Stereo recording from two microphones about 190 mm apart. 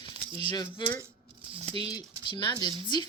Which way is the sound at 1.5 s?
30° right (ahead or behind).